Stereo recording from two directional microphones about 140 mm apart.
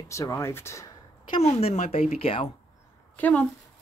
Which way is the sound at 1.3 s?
45° left (ahead or behind).